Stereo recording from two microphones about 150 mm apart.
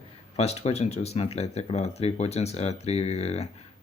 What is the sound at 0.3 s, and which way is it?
Speech, 45° left (ahead or behind).